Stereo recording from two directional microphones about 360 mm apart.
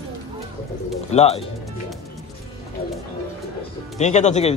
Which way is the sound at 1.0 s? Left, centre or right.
Centre.